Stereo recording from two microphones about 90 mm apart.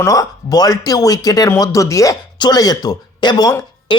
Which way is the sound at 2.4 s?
50° left (ahead or behind).